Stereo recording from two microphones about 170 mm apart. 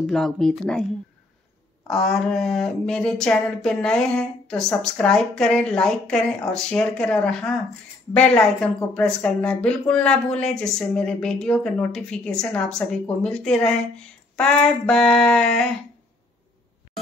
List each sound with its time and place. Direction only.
0.0 s speech: centre (ahead or behind)
1.9 s speech: centre (ahead or behind)